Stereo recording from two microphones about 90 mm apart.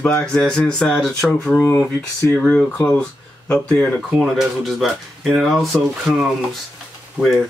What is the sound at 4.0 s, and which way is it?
Speech, centre (ahead or behind).